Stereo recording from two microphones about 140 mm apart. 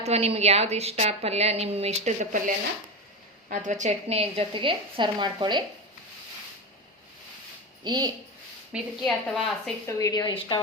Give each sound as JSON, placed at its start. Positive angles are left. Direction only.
{"t": 0.0, "sound": "a woman's voice", "side_deg": -45}
{"t": 3.5, "sound": "a woman's voice", "side_deg": -60}
{"t": 7.9, "sound": "a woman's voice", "side_deg": -30}
{"t": 8.7, "sound": "a woman's voice", "side_deg": -10}
{"t": 9.0, "sound": "a woman's voice", "side_deg": 5}
{"t": 9.8, "sound": "a woman's voice", "side_deg": 25}